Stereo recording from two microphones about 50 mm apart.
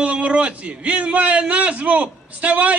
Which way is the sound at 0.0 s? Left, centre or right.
Right.